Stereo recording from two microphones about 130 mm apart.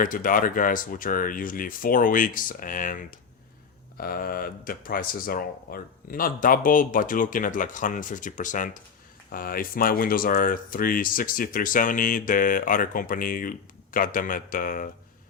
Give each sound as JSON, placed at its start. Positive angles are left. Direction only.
{"t": 0.0, "sound": "speech", "side_deg": 90}